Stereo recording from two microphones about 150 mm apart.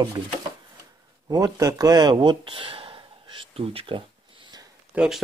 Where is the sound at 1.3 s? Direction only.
25° right (ahead or behind).